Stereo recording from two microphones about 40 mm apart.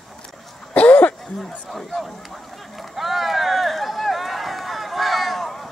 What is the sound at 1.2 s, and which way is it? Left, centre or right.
Run, centre.